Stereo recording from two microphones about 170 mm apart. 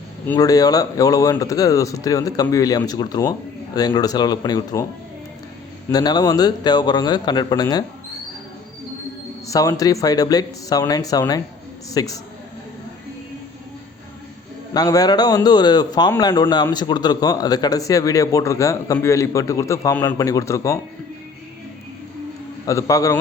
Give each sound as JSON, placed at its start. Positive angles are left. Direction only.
{"t": 0.3, "sound": "a man's voice", "side_deg": 20}
{"t": 5.9, "sound": "a man's voice", "side_deg": 25}
{"t": 9.5, "sound": "a man's voice", "side_deg": 20}
{"t": 14.7, "sound": "a man's voice", "side_deg": 20}
{"t": 22.6, "sound": "a man's voice", "side_deg": 20}